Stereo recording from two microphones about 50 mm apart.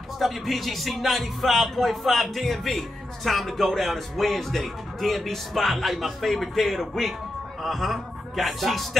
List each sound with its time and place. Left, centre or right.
0.2 s speech: centre